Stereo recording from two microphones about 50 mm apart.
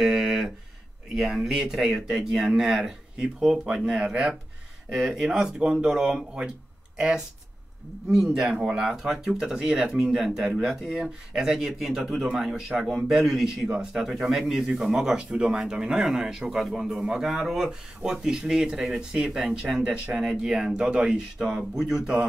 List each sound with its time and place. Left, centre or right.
0.0 s a sound: centre
1.1 s speech: centre
8.3 s speech: centre
8.5 s speech: centre
8.8 s speech: centre
21.4 s speech: centre